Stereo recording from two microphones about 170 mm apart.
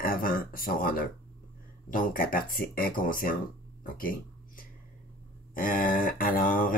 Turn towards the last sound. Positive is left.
turn(degrees=55)  # may be behind; listen again after turning